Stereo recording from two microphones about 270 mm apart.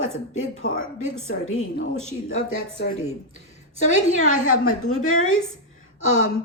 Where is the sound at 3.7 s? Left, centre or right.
Left.